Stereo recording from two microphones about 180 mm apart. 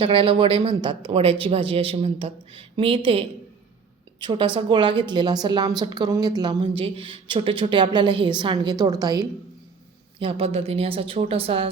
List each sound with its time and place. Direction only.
0.0 s a woman's voice: 30° right (ahead or behind)